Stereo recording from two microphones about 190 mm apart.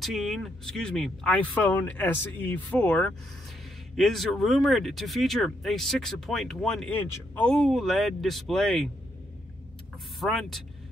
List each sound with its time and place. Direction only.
0.0 s speech: centre (ahead or behind)
10.2 s speech: centre (ahead or behind)